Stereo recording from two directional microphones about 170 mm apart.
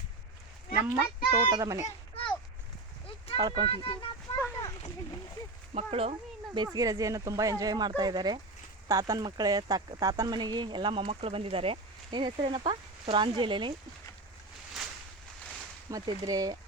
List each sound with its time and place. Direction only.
0.8 s speech: 20° right (ahead or behind)
3.3 s speech: 25° right (ahead or behind)
3.7 s speech: 30° left (ahead or behind)
4.4 s a sound: 15° left (ahead or behind)
5.7 s speech: 35° right (ahead or behind)
6.7 s speech: 20° right (ahead or behind)
15.9 s speech: 20° right (ahead or behind)